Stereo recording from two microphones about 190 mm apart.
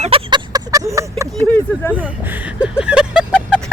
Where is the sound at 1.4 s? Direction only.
10° left (ahead or behind).